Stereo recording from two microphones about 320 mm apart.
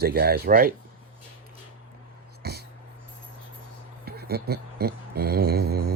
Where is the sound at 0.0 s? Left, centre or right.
Right.